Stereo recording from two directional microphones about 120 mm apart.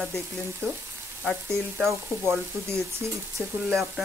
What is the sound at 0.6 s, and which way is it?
Speech, 20° right (ahead or behind).